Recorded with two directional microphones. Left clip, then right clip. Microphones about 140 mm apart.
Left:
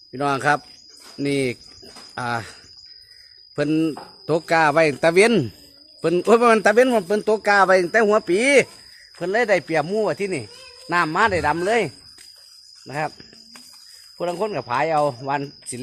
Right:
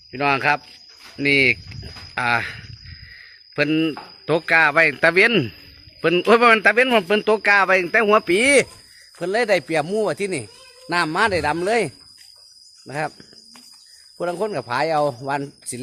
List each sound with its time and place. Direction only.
0.1 s speech: 5° right (ahead or behind)
6.7 s speech: 15° right (ahead or behind)
12.9 s speech: 25° right (ahead or behind)
14.2 s speech: 35° right (ahead or behind)